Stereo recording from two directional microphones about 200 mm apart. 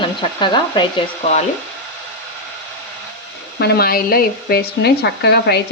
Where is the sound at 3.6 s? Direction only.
50° left (ahead or behind).